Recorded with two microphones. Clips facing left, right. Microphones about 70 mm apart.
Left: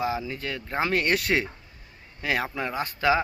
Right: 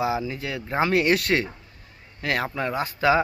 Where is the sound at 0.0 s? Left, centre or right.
Centre.